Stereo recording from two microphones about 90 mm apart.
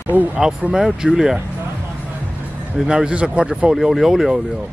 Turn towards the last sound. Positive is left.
turn(degrees=-5)  # may be behind; listen again after turning